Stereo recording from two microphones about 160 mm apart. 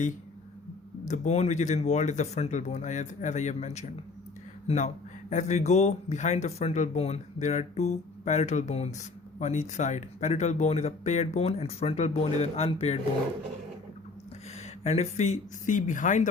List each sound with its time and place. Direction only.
1.0 s speech: 50° left (ahead or behind)
5.3 s speech: 45° left (ahead or behind)
14.8 s speech: 45° left (ahead or behind)